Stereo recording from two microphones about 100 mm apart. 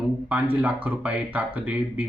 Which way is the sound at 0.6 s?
15° right (ahead or behind).